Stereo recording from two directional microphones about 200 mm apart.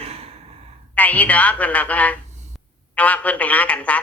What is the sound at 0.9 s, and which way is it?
Speech, 5° left (ahead or behind).